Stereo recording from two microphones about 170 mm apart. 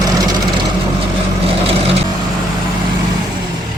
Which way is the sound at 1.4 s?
35° right (ahead or behind).